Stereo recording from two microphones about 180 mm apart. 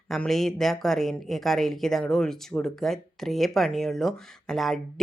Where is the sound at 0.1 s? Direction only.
Centre (ahead or behind).